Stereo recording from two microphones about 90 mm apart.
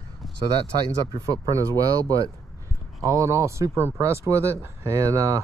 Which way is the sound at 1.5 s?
40° right (ahead or behind).